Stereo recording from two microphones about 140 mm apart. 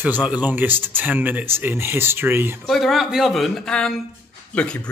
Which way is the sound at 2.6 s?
Centre (ahead or behind).